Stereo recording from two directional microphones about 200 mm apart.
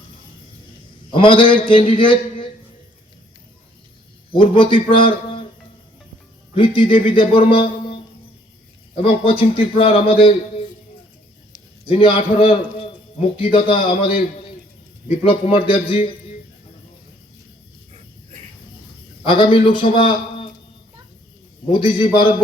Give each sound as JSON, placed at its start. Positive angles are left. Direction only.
{"t": 1.1, "sound": "a man's voice", "side_deg": 25}
{"t": 4.4, "sound": "a man's voice", "side_deg": 25}
{"t": 6.5, "sound": "a man's voice", "side_deg": 25}
{"t": 11.9, "sound": "a man's voice", "side_deg": 25}
{"t": 15.2, "sound": "a man's voice", "side_deg": 25}
{"t": 19.2, "sound": "a man's voice", "side_deg": 25}
{"t": 21.7, "sound": "a man's voice", "side_deg": 25}